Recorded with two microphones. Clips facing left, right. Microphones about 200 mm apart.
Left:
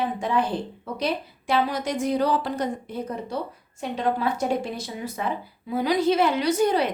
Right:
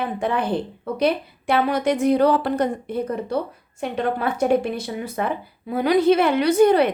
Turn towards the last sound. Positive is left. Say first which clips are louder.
# right 6 dB
turn(degrees=-60)  # may be behind; listen again after turning